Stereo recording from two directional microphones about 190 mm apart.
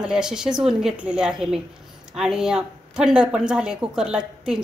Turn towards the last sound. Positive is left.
turn(degrees=-5)  # may be behind; listen again after turning